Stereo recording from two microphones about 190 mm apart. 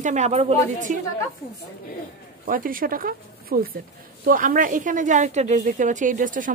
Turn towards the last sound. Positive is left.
turn(degrees=-45)  # may be behind; listen again after turning